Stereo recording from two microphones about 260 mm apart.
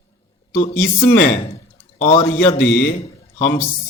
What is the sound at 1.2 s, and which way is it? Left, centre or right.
Speech, left.